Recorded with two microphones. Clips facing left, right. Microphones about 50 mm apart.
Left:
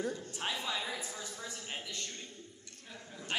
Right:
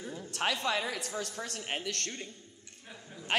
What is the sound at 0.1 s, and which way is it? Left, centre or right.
A man's voice, right.